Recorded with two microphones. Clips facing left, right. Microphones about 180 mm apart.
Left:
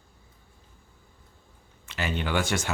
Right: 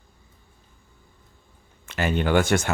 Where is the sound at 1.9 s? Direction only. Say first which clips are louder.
Right 7 dB; 50° right (ahead or behind).